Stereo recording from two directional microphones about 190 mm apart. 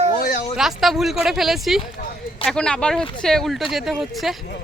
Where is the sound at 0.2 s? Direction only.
45° left (ahead or behind).